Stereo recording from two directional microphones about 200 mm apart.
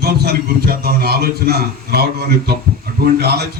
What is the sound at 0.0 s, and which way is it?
A man's voice, 50° right (ahead or behind).